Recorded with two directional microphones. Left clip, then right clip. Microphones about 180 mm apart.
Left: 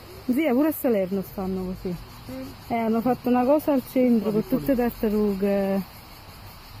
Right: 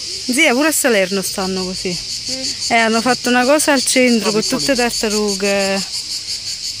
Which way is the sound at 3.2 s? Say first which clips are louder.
Right 6 dB; 45° right (ahead or behind).